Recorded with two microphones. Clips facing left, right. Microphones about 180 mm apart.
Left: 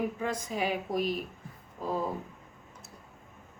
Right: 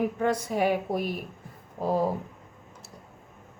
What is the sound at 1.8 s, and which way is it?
Speech, 75° right (ahead or behind).